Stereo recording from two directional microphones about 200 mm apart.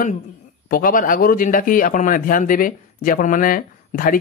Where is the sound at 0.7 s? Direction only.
45° left (ahead or behind).